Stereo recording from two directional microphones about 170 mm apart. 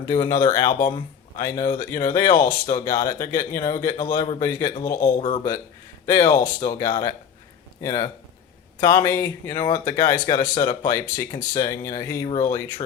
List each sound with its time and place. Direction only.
0.0 s speech: 25° left (ahead or behind)